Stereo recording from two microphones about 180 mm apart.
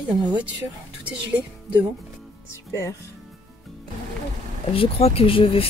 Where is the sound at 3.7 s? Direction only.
Centre (ahead or behind).